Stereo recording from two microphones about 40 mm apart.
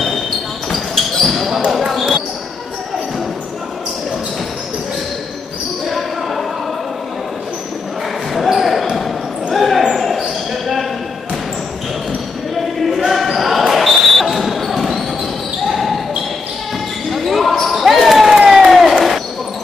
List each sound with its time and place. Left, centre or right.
0.7 s basketball bounce: centre
1.7 s speech: centre
5.9 s basketball bounce: centre
8.4 s basketball bounce: centre
13.1 s basketball bounce: centre
17.1 s basketball bounce: centre
18.5 s crowd: centre